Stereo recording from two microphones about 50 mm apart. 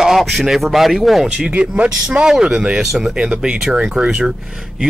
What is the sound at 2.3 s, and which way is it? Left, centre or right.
Speech, centre.